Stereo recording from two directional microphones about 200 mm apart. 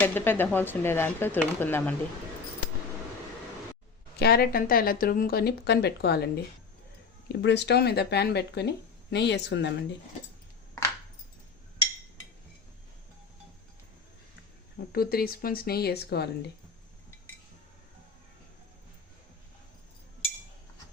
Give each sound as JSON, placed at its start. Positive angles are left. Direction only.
{"t": 0.0, "sound": "speech", "side_deg": 10}
{"t": 4.2, "sound": "speech", "side_deg": 50}
{"t": 7.4, "sound": "speech", "side_deg": 60}
{"t": 14.9, "sound": "speech", "side_deg": 50}